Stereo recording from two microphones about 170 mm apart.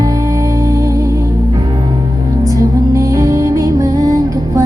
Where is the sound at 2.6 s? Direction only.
20° right (ahead or behind).